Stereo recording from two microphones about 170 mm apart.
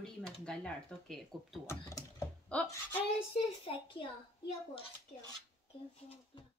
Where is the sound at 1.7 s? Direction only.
15° left (ahead or behind).